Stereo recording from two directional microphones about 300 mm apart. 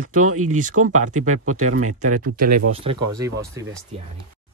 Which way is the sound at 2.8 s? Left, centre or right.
Centre.